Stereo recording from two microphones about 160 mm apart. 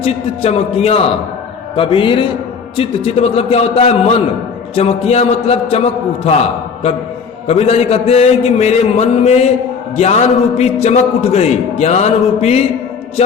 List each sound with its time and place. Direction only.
0.0 s a man's voice: 40° left (ahead or behind)
7.4 s a man's voice: 40° left (ahead or behind)